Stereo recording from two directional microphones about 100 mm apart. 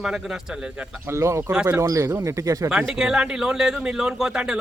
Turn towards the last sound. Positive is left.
turn(degrees=-10)  # may be behind; listen again after turning